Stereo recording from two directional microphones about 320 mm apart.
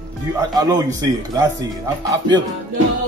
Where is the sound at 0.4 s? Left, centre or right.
Centre.